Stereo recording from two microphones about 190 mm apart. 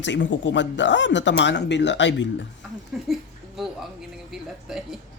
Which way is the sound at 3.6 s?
Centre (ahead or behind).